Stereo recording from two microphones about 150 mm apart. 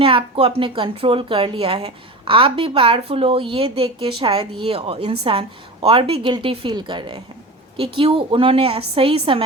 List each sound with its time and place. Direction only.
0.0 s speech: 35° right (ahead or behind)